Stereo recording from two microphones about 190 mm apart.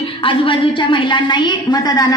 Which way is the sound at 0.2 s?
25° left (ahead or behind).